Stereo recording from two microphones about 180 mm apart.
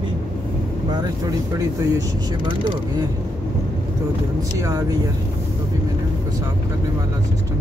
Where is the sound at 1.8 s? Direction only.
20° right (ahead or behind).